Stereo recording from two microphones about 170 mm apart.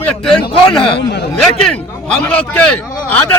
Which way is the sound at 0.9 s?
75° left (ahead or behind).